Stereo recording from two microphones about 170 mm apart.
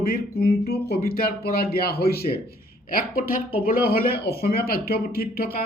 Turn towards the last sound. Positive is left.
turn(degrees=65)  # may be behind; listen again after turning